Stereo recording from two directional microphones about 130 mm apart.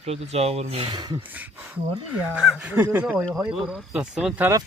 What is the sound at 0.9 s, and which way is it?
Speech, 35° right (ahead or behind).